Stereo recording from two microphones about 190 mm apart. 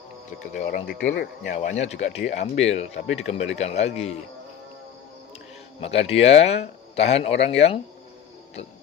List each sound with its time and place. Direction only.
0.5 s speech: 45° left (ahead or behind)
1.1 s speech: 60° left (ahead or behind)
1.5 s speech: 35° left (ahead or behind)
5.8 s speech: 30° left (ahead or behind)